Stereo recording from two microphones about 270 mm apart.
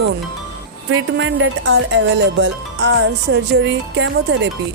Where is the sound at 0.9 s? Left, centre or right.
Right.